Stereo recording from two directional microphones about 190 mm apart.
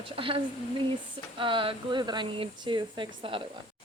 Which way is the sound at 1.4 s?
25° right (ahead or behind).